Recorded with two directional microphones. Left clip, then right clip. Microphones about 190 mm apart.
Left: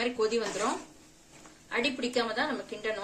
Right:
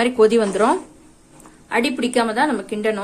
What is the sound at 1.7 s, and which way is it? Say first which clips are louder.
A woman's voice: right 10 dB; 40° right (ahead or behind).